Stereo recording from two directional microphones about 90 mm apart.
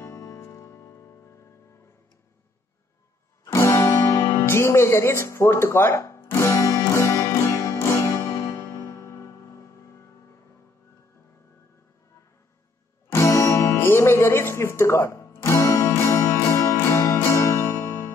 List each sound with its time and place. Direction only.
0.0 s music: 35° left (ahead or behind)
3.5 s music: 35° left (ahead or behind)
13.1 s music: 30° left (ahead or behind)